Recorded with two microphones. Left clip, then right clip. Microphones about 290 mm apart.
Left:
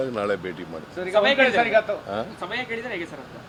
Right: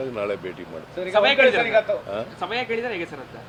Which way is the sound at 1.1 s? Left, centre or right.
Right.